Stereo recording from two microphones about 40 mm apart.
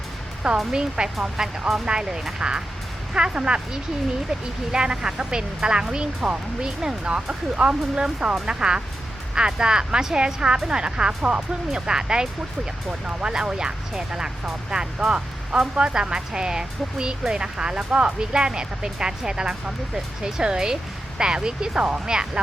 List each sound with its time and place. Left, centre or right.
0.7 s speech: centre